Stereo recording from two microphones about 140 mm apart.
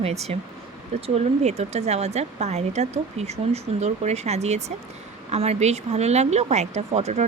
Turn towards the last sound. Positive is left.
turn(degrees=-50)  # may be behind; listen again after turning